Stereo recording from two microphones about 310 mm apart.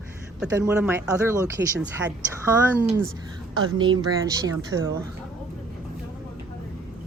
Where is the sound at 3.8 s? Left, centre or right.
Centre.